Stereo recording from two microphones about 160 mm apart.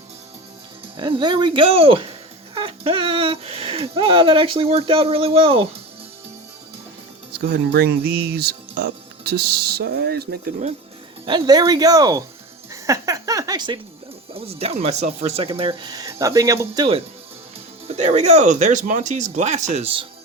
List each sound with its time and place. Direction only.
0.9 s speech: 30° right (ahead or behind)
7.3 s speech: 75° right (ahead or behind)
11.3 s speech: 25° right (ahead or behind)
14.3 s speech: 40° right (ahead or behind)
16.0 s speech: 20° right (ahead or behind)
17.8 s speech: 40° right (ahead or behind)